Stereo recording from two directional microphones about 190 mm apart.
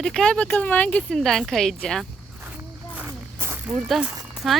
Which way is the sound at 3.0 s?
10° right (ahead or behind).